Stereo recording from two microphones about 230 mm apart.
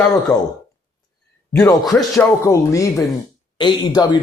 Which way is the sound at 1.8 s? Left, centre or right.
Centre.